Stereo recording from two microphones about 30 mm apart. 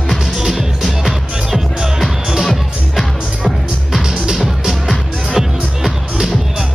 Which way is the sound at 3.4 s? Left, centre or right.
Centre.